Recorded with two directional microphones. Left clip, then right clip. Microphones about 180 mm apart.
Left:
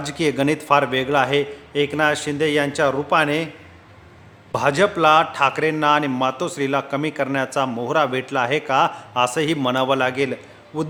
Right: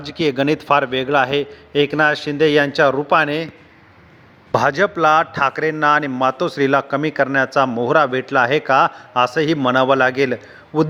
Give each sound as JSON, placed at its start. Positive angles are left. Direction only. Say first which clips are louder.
{"t": 0.0, "sound": "a man's voice", "louder": "right 2 dB", "side_deg": -30}
{"t": 4.5, "sound": "a man's voice", "louder": "right 2 dB", "side_deg": -30}